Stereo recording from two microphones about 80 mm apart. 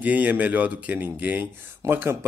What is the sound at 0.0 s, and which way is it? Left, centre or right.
Speech, centre.